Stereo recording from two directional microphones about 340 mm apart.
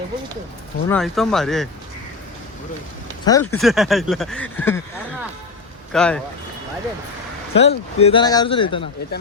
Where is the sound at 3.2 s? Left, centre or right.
Centre.